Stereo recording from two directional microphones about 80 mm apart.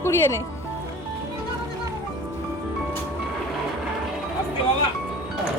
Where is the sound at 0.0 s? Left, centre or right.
Left.